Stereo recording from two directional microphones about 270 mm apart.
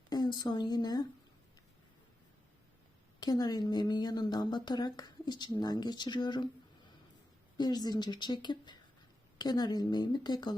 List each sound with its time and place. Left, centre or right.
0.1 s speech: centre
3.2 s speech: centre
7.5 s speech: centre